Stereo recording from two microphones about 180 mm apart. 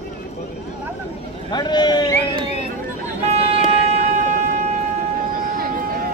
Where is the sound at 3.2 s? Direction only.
35° right (ahead or behind).